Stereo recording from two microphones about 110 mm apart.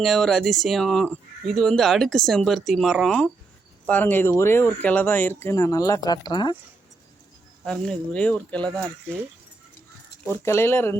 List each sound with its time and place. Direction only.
0.0 s speech: centre (ahead or behind); by 6.6 s 45° left (ahead or behind)
7.6 s speech: 5° left (ahead or behind)
10.2 s speech: 25° left (ahead or behind)